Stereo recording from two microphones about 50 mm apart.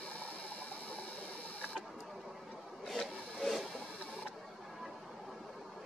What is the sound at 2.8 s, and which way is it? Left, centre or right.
Rub, centre.